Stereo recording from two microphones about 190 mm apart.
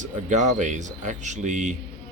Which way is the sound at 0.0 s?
40° right (ahead or behind).